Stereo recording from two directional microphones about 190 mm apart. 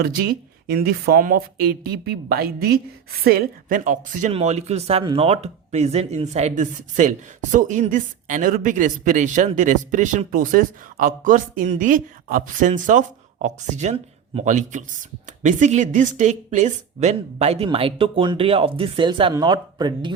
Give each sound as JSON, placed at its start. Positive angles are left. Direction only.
{"t": 0.0, "sound": "speech", "side_deg": -50}